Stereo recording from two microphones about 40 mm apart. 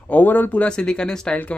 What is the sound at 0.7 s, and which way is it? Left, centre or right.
Speech, left.